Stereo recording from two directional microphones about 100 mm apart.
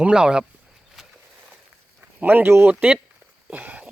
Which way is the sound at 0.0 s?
10° right (ahead or behind).